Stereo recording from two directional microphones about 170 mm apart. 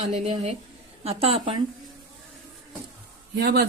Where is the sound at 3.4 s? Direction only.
75° right (ahead or behind).